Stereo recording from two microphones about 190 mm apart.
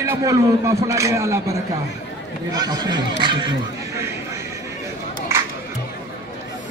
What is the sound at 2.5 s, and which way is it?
Speech, 20° right (ahead or behind).